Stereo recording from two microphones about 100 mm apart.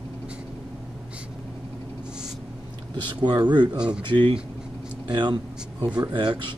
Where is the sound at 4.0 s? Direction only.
55° right (ahead or behind).